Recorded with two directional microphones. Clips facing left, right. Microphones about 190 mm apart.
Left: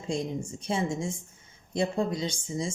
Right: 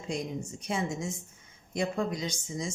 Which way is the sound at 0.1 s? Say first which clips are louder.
Left 3 dB; 30° left (ahead or behind).